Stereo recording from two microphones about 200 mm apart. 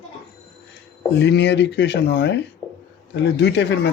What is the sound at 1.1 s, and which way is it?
Speech, 60° left (ahead or behind).